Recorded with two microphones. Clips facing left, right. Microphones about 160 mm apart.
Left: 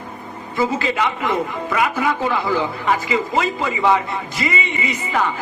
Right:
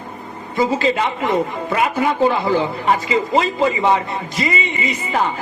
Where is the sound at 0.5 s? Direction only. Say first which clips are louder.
Right 3 dB; 30° right (ahead or behind).